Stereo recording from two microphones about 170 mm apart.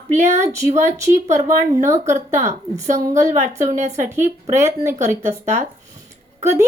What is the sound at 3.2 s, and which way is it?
Speech, 15° right (ahead or behind).